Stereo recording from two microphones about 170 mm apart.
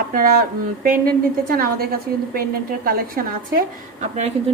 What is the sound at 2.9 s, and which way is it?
A woman's voice, 60° right (ahead or behind).